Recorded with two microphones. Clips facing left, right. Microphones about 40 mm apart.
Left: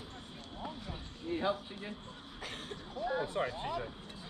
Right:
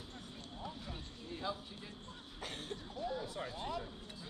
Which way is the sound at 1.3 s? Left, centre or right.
Left.